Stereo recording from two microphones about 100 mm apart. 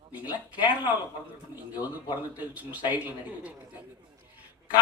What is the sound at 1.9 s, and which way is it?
A man's voice, 15° right (ahead or behind).